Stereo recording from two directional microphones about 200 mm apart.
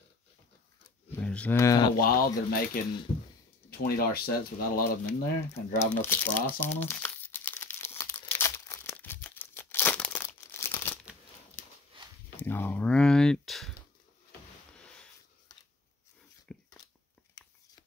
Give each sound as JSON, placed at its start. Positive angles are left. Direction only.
{"t": 1.1, "sound": "speech", "side_deg": 5}
{"t": 2.0, "sound": "speech", "side_deg": 45}
{"t": 3.7, "sound": "speech", "side_deg": 50}
{"t": 5.0, "sound": "crumpling", "side_deg": 10}
{"t": 12.4, "sound": "a sound", "side_deg": 10}
{"t": 16.5, "sound": "a sound", "side_deg": 5}